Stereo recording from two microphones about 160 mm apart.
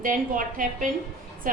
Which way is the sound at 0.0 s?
60° right (ahead or behind).